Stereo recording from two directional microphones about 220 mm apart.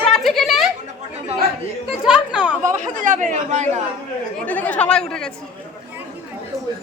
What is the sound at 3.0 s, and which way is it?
Speech, 35° right (ahead or behind).